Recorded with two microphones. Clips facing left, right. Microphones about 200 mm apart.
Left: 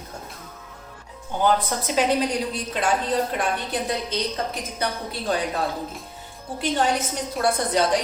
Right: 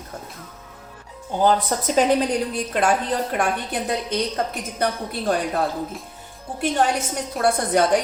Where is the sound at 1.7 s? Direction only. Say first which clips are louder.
Right 3 dB; 40° right (ahead or behind).